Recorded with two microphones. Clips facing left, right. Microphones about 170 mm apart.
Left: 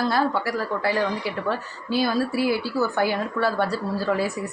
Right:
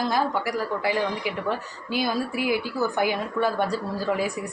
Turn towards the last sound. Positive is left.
turn(degrees=-15)  # may be behind; listen again after turning